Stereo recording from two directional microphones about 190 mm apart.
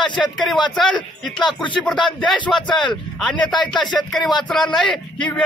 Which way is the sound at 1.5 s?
25° left (ahead or behind).